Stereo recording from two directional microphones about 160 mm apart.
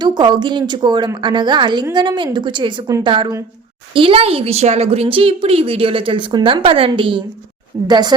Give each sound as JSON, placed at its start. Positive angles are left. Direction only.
{"t": 0.0, "sound": "a woman's voice", "side_deg": -25}